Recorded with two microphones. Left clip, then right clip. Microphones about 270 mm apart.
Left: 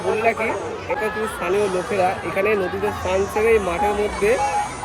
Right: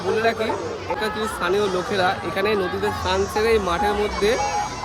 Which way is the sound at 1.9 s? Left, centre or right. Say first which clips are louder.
Left 1 dB; centre.